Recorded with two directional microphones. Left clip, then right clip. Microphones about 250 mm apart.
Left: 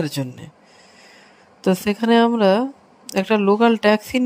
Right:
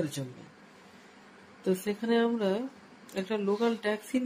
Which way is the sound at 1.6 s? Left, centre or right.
Left.